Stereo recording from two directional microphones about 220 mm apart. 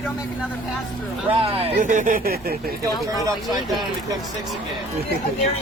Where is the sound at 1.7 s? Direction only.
35° right (ahead or behind).